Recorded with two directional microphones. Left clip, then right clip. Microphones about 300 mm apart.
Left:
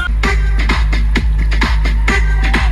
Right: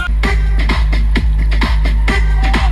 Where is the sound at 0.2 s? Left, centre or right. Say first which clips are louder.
Left 2 dB; right.